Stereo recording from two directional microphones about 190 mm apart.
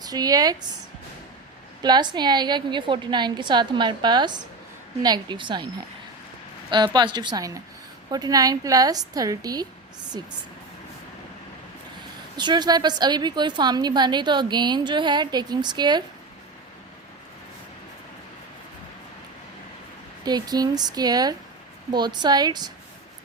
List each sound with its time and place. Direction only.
0.0 s a woman's voice: 20° right (ahead or behind)
1.8 s a woman's voice: 20° right (ahead or behind)
6.7 s a woman's voice: 25° right (ahead or behind)
12.4 s a woman's voice: 25° right (ahead or behind)
20.2 s a woman's voice: 20° right (ahead or behind)